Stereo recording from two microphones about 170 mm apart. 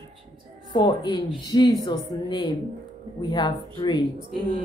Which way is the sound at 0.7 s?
25° left (ahead or behind).